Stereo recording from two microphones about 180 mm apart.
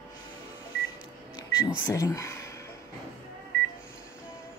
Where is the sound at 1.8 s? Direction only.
15° left (ahead or behind).